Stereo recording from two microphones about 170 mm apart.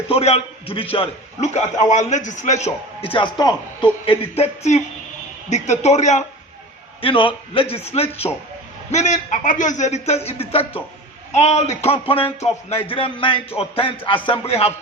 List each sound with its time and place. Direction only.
0.1 s a man's voice: 35° left (ahead or behind)
7.0 s a man's voice: 30° left (ahead or behind)